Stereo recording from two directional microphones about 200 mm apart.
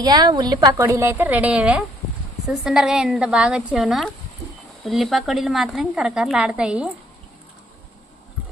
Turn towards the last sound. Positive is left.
turn(degrees=-5)  # may be behind; listen again after turning